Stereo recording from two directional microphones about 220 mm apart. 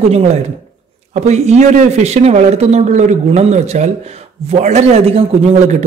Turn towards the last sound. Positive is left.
turn(degrees=-30)  # may be behind; listen again after turning